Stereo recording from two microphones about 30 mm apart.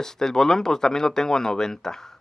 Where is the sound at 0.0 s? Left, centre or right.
Centre.